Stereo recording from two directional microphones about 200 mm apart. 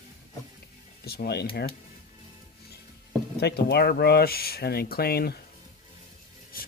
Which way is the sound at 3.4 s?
55° left (ahead or behind).